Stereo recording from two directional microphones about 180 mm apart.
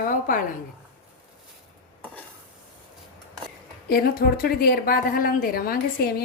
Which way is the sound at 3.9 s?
55° left (ahead or behind).